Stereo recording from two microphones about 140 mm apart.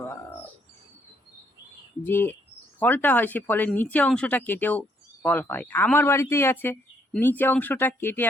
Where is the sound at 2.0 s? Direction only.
15° left (ahead or behind).